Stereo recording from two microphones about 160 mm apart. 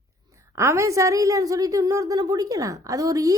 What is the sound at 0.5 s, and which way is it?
A woman's voice, 20° right (ahead or behind).